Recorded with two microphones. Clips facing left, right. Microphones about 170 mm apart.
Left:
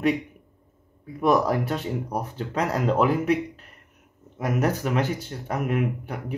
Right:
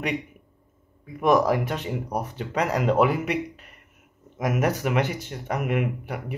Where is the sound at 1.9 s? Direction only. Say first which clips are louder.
Even; 5° right (ahead or behind).